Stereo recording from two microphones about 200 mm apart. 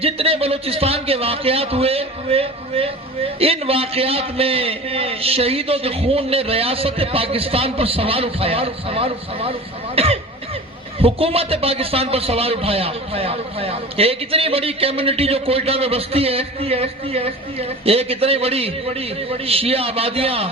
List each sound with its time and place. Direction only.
0.0 s a man's voice: 30° right (ahead or behind)